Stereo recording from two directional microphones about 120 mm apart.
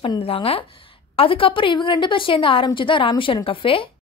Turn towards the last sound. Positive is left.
turn(degrees=45)  # may be behind; listen again after turning